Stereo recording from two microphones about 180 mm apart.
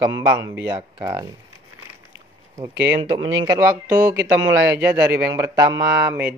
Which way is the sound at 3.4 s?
15° right (ahead or behind).